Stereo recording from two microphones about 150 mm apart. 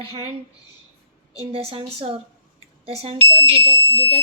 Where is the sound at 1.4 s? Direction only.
40° right (ahead or behind).